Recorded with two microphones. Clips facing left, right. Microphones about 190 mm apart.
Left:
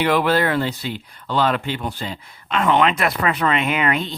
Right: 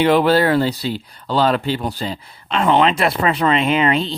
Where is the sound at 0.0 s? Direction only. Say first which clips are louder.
Right 4 dB; 30° right (ahead or behind).